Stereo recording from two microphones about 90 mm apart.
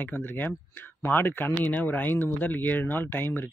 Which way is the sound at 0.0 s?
20° left (ahead or behind).